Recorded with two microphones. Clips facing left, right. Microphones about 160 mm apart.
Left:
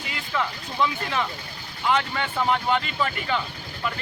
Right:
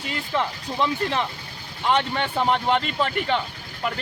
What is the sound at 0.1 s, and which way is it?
Speech, 30° right (ahead or behind).